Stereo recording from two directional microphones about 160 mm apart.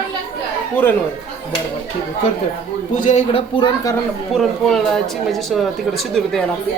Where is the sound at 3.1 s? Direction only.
40° left (ahead or behind).